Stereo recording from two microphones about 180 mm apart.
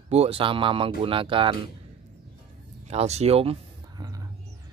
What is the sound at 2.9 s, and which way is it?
Speech, 35° right (ahead or behind).